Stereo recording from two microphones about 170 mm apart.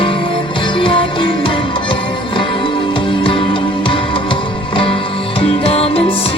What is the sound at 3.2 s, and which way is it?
Music, 30° left (ahead or behind).